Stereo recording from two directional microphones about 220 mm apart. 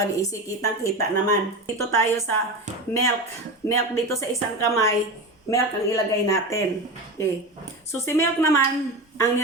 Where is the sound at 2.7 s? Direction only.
35° right (ahead or behind).